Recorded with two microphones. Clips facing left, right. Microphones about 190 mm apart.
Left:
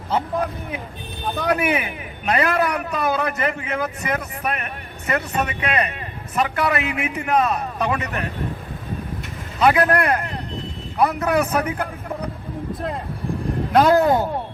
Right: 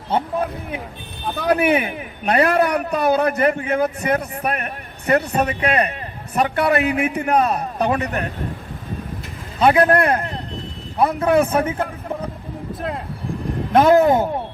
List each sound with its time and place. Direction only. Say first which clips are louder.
1.5 s a man's voice: right 5 dB; 30° right (ahead or behind)
9.6 s speech: right 3 dB; 30° right (ahead or behind)
13.7 s speech: right 2 dB; 20° right (ahead or behind)